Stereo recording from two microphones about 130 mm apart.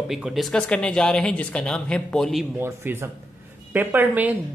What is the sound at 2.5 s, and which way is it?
Speech, 20° right (ahead or behind).